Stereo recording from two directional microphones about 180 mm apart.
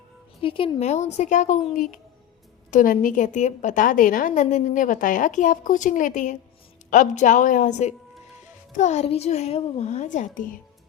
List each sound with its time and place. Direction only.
0.4 s a child's voice: 30° left (ahead or behind); by 10.6 s 50° left (ahead or behind)